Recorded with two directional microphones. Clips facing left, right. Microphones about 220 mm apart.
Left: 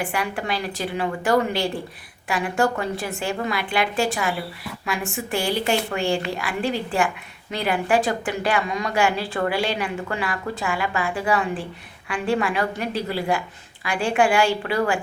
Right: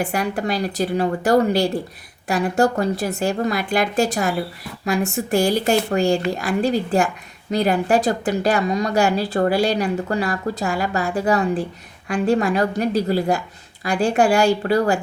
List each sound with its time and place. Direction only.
0.0 s a woman's voice: 40° right (ahead or behind)